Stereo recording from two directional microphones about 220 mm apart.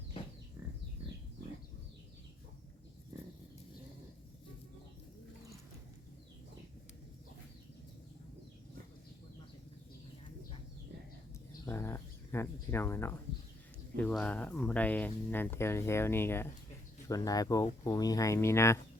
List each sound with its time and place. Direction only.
11.6 s speech: 10° left (ahead or behind)